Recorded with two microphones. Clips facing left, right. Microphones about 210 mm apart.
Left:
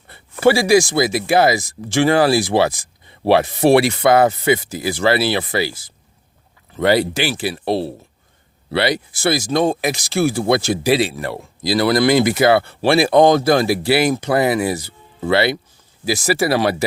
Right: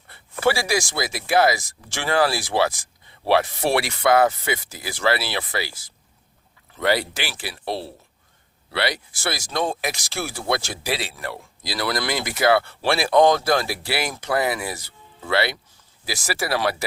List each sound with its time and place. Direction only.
0.1 s a sound: 25° left (ahead or behind)
0.9 s speech: 25° left (ahead or behind)
6.7 s speech: 25° left (ahead or behind)